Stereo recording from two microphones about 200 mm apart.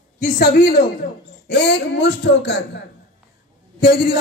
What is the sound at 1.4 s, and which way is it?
Speech, 55° left (ahead or behind).